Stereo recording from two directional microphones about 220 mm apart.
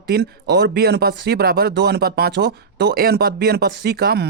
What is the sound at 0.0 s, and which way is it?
A man's voice, 45° right (ahead or behind).